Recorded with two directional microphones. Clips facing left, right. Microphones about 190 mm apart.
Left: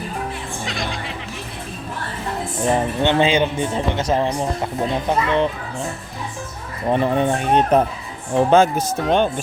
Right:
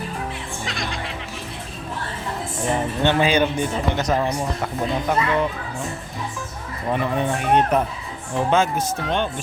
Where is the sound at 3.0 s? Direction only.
20° left (ahead or behind).